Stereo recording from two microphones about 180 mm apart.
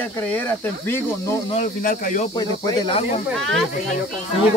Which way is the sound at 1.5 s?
45° left (ahead or behind).